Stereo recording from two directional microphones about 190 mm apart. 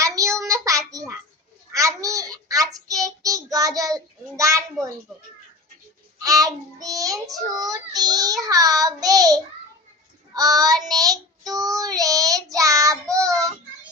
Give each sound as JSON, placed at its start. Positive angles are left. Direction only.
{"t": 0.0, "sound": "child singing", "side_deg": -15}
{"t": 6.2, "sound": "a child's voice", "side_deg": -20}
{"t": 7.5, "sound": "child singing", "side_deg": -20}